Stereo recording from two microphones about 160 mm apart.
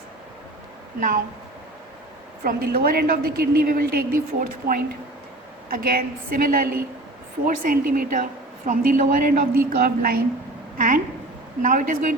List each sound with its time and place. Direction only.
0.9 s a woman's voice: 60° right (ahead or behind)
2.4 s a woman's voice: 70° right (ahead or behind)
10.8 s a woman's voice: 55° right (ahead or behind)